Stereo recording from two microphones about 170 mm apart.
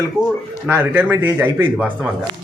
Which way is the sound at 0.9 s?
10° right (ahead or behind).